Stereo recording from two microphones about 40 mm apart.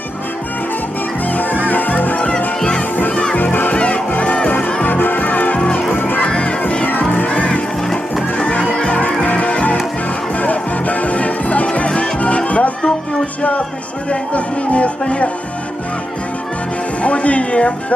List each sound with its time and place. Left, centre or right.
1.3 s music: left
3.8 s music: left
4.8 s music: left
6.2 s music: left
7.3 s crowd: left
8.4 s music: left
9.0 s music: left
14.1 s music: left
17.0 s speech: left